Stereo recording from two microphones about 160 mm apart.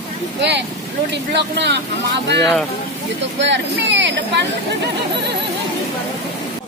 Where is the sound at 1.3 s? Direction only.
90° right.